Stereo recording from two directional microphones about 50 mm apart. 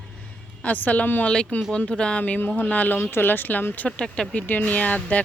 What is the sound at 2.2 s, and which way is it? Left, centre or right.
Speech, left.